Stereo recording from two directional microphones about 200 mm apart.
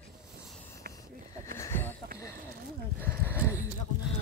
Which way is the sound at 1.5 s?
10° left (ahead or behind).